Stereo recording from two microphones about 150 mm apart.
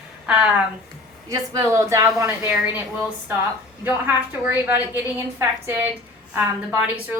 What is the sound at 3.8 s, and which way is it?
A woman's voice, 15° right (ahead or behind).